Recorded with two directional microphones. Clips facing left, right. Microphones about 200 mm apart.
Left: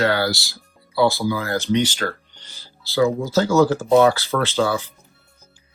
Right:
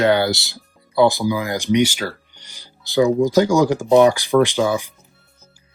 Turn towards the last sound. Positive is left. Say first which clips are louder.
# right 2 dB
turn(degrees=-15)  # may be behind; listen again after turning